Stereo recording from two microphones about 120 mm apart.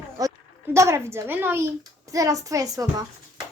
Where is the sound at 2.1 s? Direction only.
30° right (ahead or behind).